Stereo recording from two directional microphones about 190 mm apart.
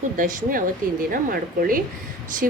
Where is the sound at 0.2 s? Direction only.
45° right (ahead or behind).